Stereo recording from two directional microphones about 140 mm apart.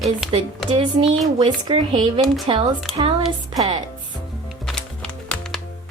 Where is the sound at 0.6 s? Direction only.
35° right (ahead or behind).